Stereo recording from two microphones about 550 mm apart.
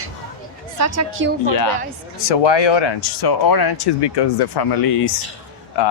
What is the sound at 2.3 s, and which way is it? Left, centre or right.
Speech, left.